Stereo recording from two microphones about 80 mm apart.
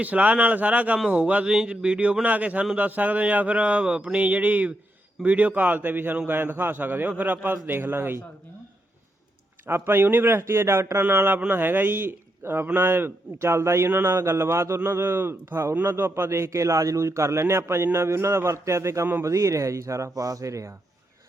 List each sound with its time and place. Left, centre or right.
0.0 s a man's voice: centre
9.6 s a man's voice: right